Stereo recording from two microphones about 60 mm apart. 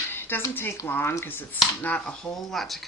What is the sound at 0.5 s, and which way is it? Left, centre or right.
Speech, left.